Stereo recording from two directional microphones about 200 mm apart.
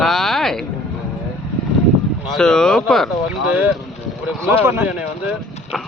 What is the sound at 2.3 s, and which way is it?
Speech, 5° left (ahead or behind).